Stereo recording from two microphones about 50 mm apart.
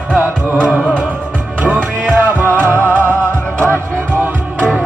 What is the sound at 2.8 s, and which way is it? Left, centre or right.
Music, left.